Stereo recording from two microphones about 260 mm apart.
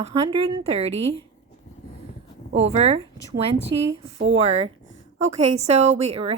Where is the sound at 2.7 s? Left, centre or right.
Right.